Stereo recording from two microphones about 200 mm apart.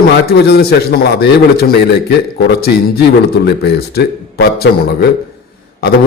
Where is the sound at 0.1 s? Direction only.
55° left (ahead or behind).